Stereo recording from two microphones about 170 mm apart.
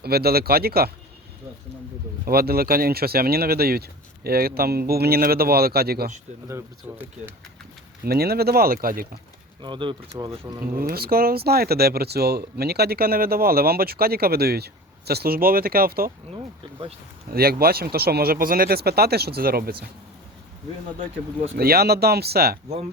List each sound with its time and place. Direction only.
0.0 s speech: 65° right (ahead or behind)
2.2 s speech: 65° right (ahead or behind)
6.5 s speech: 10° right (ahead or behind)
8.0 s speech: 65° right (ahead or behind)
9.6 s speech: 30° right (ahead or behind)
10.9 s speech: 60° right (ahead or behind)
17.3 s speech: 65° right (ahead or behind)
21.6 s speech: 65° right (ahead or behind)